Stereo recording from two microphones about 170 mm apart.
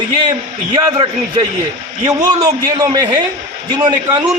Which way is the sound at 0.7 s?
20° right (ahead or behind).